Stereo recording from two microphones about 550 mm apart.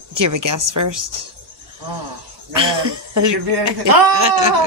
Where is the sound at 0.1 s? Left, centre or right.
Right.